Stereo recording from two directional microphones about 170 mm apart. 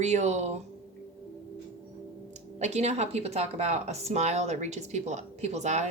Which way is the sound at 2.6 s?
40° right (ahead or behind).